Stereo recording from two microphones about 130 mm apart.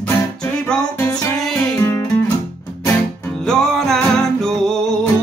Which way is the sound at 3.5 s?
5° left (ahead or behind).